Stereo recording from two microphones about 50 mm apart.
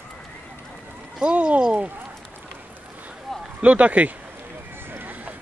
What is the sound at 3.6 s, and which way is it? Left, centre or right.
Speech, right.